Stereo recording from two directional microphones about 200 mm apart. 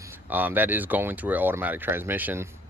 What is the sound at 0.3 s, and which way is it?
Speech, 10° right (ahead or behind).